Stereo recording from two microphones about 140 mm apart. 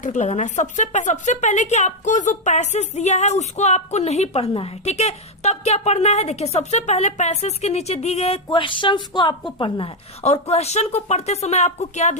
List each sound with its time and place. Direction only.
0.0 s a woman's voice: 60° left (ahead or behind)
8.4 s a woman's voice: 35° left (ahead or behind); by 12.1 s 55° left (ahead or behind)